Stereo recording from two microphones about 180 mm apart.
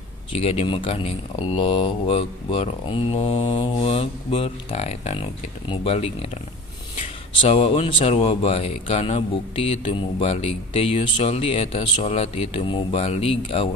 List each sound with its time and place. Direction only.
0.3 s speech: 35° left (ahead or behind)